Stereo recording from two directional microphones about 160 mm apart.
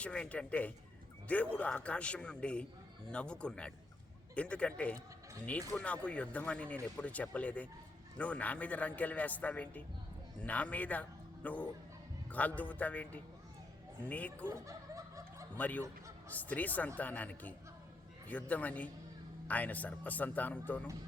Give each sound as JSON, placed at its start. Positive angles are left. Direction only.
{"t": 0.0, "sound": "speech", "side_deg": 5}
{"t": 14.4, "sound": "snicker", "side_deg": -20}
{"t": 15.5, "sound": "speech", "side_deg": 10}